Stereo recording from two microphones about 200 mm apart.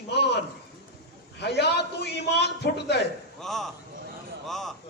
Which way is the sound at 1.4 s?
55° left (ahead or behind).